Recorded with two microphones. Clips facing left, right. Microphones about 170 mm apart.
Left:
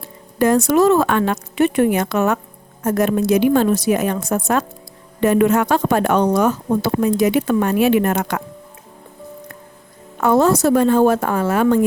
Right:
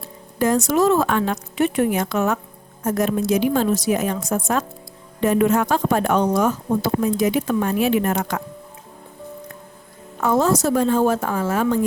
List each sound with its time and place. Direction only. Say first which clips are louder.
0.3 s speech: left 4 dB; 60° left (ahead or behind)
10.2 s speech: left 4 dB; 65° left (ahead or behind)